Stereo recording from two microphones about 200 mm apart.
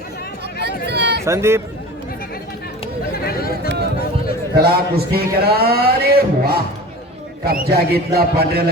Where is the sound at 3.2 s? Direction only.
50° left (ahead or behind).